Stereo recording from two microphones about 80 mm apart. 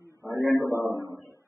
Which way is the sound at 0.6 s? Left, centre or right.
Left.